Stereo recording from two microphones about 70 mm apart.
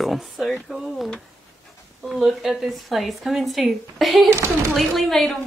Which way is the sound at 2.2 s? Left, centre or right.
Centre.